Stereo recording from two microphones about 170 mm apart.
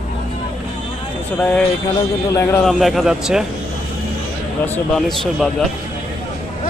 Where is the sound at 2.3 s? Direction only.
15° left (ahead or behind).